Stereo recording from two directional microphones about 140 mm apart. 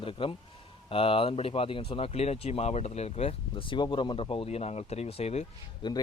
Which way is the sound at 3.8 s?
30° left (ahead or behind).